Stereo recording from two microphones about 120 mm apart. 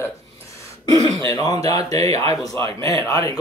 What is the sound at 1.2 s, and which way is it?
Speech, 30° left (ahead or behind).